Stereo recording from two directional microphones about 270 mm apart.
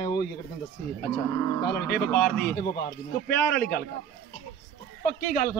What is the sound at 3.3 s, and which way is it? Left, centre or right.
Speech, centre.